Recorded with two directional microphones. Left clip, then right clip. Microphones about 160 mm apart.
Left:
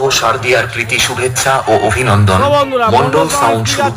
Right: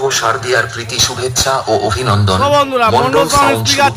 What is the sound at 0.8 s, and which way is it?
Speech, 40° left (ahead or behind).